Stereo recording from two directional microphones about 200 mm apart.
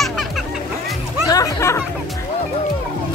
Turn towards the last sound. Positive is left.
turn(degrees=15)  # may be behind; listen again after turning